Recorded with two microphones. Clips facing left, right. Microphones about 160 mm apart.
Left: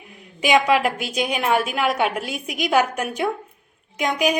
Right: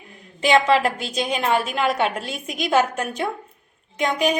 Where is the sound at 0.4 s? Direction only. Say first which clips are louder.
Even; 10° left (ahead or behind).